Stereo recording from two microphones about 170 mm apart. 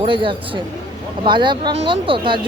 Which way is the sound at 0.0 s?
30° right (ahead or behind).